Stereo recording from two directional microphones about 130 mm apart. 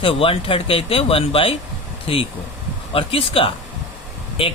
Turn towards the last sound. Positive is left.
turn(degrees=45)  # may be behind; listen again after turning